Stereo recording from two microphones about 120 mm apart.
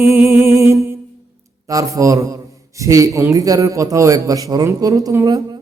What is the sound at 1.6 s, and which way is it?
A man's voice, 30° right (ahead or behind).